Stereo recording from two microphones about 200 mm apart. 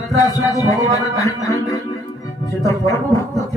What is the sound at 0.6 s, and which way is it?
Music, 15° left (ahead or behind).